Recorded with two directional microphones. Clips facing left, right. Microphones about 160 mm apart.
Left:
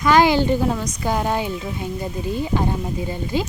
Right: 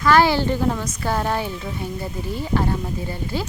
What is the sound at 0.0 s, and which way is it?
Speech, 15° left (ahead or behind).